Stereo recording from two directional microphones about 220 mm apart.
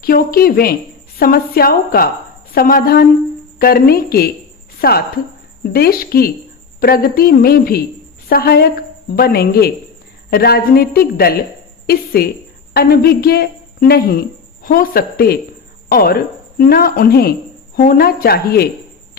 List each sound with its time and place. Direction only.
0.0 s a woman's voice: 40° left (ahead or behind)